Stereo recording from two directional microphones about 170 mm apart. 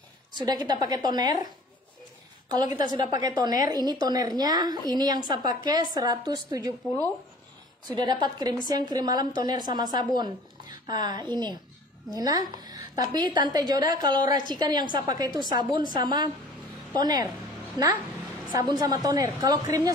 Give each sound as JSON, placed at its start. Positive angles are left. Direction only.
{"t": 0.5, "sound": "a woman's voice", "side_deg": -25}
{"t": 2.5, "sound": "a woman's voice", "side_deg": -25}
{"t": 7.9, "sound": "a woman's voice", "side_deg": -25}